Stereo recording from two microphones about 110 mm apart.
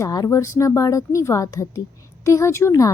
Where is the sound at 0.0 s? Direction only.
35° left (ahead or behind).